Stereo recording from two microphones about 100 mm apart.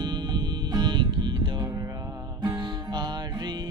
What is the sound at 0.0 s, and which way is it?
Music, 45° right (ahead or behind).